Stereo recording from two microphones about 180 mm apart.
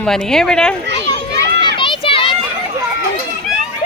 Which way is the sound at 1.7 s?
30° left (ahead or behind).